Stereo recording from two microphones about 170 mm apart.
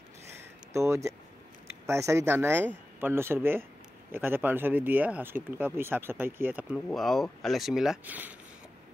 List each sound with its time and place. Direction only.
0.7 s speech: 15° right (ahead or behind)
6.9 s speech: centre (ahead or behind)